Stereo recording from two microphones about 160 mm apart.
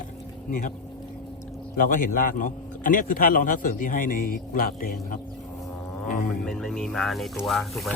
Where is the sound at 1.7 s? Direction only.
60° left (ahead or behind).